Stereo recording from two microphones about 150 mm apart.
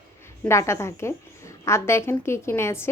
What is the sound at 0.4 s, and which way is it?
A woman's voice, 20° left (ahead or behind).